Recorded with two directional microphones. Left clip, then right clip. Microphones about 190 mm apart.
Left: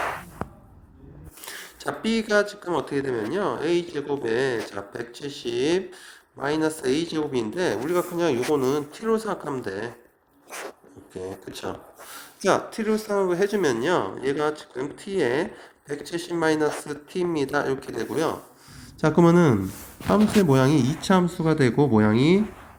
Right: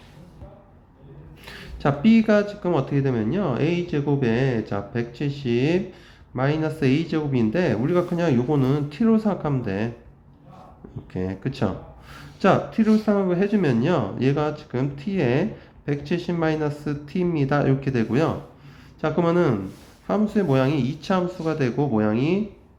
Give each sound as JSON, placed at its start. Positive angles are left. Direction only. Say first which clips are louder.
{"t": 1.5, "sound": "a man's voice", "louder": "right 6 dB", "side_deg": 45}
{"t": 12.1, "sound": "a man's voice", "louder": "right 3 dB", "side_deg": 45}